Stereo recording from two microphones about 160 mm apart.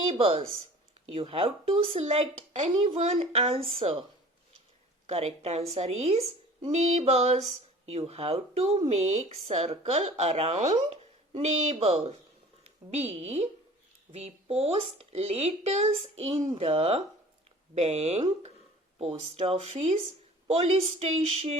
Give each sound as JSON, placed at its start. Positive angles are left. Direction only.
{"t": 0.1, "sound": "speech", "side_deg": -35}
{"t": 5.0, "sound": "speech", "side_deg": -40}